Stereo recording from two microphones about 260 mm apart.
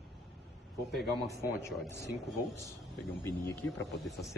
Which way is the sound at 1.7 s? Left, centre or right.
Centre.